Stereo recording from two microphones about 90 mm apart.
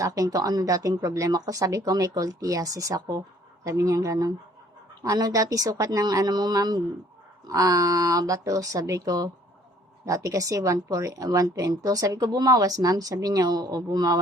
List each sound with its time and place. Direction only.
0.0 s a woman's voice: 40° right (ahead or behind)